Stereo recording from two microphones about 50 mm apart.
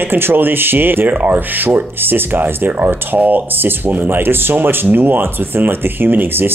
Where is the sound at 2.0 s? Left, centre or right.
Right.